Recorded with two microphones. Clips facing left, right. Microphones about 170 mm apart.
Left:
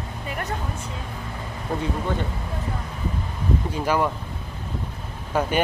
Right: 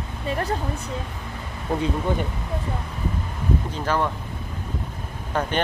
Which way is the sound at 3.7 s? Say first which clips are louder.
Left 3 dB; 10° left (ahead or behind).